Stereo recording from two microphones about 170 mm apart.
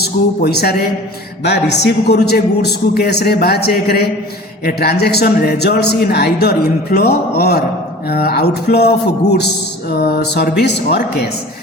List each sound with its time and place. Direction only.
0.0 s a man's voice: 70° left (ahead or behind)
1.5 s a man's voice: 85° left; by 8.9 s 70° left (ahead or behind)
9.9 s music: 65° left (ahead or behind)
10.6 s a man's voice: 70° left (ahead or behind)